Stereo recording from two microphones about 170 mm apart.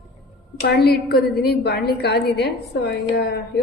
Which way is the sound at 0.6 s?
70° left (ahead or behind).